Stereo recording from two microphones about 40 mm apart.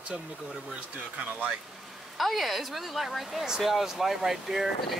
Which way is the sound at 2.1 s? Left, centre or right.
Centre.